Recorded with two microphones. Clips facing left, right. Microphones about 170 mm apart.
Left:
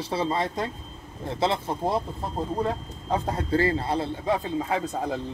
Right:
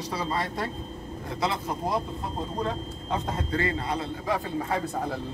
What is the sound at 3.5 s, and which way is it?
A man's voice, 30° left (ahead or behind).